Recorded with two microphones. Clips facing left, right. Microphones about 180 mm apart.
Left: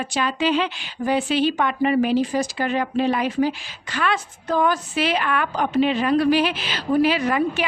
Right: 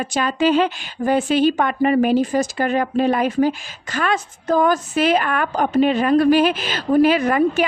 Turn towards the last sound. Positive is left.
turn(degrees=-50)  # may be behind; listen again after turning